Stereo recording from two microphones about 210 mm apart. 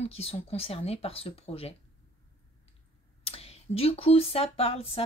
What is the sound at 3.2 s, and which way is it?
Speech, 30° left (ahead or behind).